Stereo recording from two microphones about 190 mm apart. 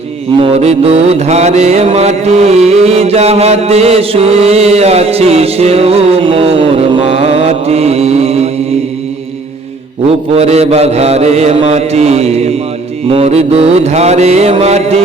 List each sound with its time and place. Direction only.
0.4 s music: 35° right (ahead or behind)
10.1 s music: 35° right (ahead or behind)